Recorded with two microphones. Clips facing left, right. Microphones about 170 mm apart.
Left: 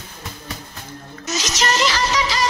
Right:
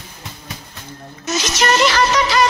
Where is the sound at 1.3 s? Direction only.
55° right (ahead or behind).